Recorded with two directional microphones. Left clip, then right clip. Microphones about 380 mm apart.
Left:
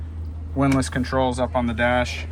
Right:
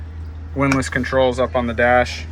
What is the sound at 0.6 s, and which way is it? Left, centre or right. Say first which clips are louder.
Speech: right 3 dB; centre.